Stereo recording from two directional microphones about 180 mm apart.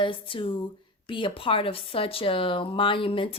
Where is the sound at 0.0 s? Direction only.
30° left (ahead or behind).